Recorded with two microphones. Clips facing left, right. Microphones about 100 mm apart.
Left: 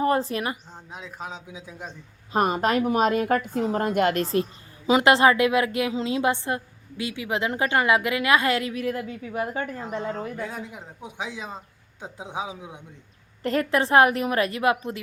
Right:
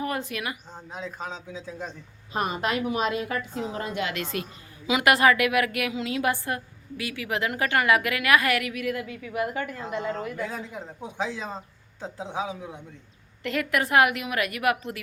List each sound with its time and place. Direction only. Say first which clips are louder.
0.0 s a woman's voice: left 7 dB; 35° left (ahead or behind)
0.7 s a man's voice: right 3 dB; centre (ahead or behind)
2.3 s a woman's voice: left 5 dB; 40° left (ahead or behind)
10.3 s a man's voice: right 1 dB; 5° left (ahead or behind)
13.4 s a woman's voice: left 4 dB; 35° left (ahead or behind)